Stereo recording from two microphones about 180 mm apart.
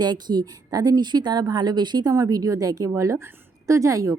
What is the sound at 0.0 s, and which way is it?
A woman's voice, 25° right (ahead or behind).